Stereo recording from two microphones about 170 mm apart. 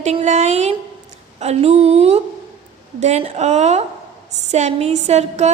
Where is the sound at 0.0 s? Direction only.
45° right (ahead or behind).